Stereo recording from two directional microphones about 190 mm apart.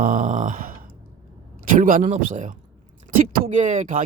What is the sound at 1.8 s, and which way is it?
Speech, 45° right (ahead or behind).